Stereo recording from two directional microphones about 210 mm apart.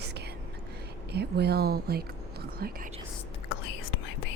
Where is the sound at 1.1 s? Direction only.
50° right (ahead or behind).